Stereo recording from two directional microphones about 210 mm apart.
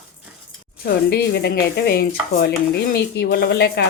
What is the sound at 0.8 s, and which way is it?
Speech, 50° left (ahead or behind).